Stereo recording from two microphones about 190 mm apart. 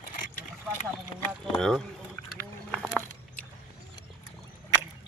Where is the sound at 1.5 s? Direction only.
5° left (ahead or behind).